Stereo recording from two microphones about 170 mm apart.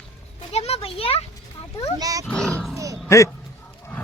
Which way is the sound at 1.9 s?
20° right (ahead or behind).